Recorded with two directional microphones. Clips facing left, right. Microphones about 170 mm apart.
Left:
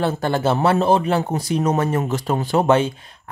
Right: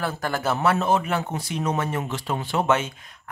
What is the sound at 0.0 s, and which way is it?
Speech, 25° left (ahead or behind).